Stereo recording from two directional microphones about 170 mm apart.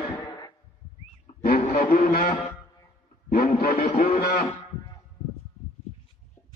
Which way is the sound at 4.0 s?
65° left (ahead or behind).